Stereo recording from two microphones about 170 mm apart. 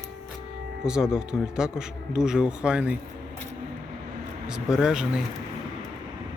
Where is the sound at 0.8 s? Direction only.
5° right (ahead or behind).